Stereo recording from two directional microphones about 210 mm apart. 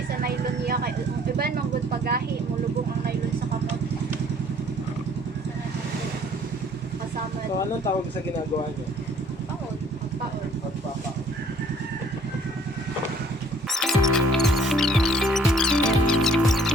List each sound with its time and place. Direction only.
0.2 s music: 45° right (ahead or behind)
1.9 s speech: 45° right (ahead or behind)
13.7 s music: centre (ahead or behind)